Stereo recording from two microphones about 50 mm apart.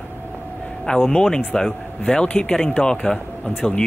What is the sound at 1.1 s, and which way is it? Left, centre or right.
A man's voice, centre.